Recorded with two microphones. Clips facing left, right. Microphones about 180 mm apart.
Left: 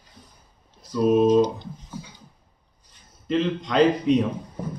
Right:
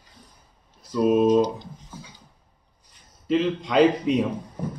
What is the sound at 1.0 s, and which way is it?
Speech, 5° right (ahead or behind).